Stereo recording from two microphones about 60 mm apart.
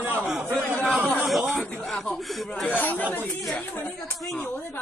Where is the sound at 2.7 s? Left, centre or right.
Left.